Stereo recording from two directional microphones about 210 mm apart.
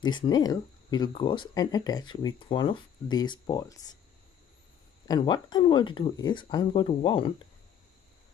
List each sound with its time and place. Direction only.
0.0 s speech: 20° left (ahead or behind)
5.0 s speech: 20° left (ahead or behind)